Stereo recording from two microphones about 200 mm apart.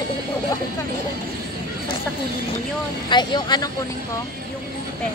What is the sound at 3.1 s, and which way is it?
Speech, 20° left (ahead or behind).